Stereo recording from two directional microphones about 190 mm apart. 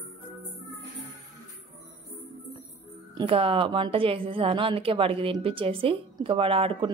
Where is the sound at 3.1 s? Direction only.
30° right (ahead or behind).